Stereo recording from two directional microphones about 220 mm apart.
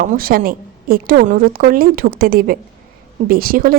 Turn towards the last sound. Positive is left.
turn(degrees=-40)  # may be behind; listen again after turning